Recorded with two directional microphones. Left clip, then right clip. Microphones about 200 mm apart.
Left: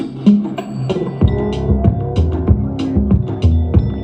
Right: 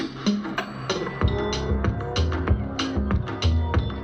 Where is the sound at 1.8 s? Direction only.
60° left (ahead or behind).